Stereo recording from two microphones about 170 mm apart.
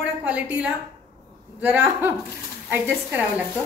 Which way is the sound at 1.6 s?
10° right (ahead or behind).